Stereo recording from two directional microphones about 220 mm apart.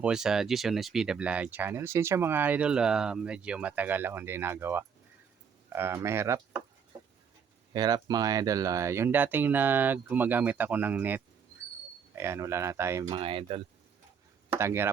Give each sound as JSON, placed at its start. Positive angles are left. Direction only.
{"t": 0.0, "sound": "speech", "side_deg": -5}
{"t": 7.7, "sound": "speech", "side_deg": -20}
{"t": 13.1, "sound": "speech", "side_deg": -25}
{"t": 14.5, "sound": "speech", "side_deg": -10}